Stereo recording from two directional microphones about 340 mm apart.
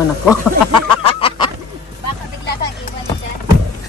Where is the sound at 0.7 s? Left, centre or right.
Centre.